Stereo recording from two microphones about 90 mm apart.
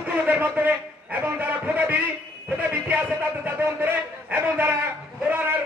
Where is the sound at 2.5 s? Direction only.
15° right (ahead or behind).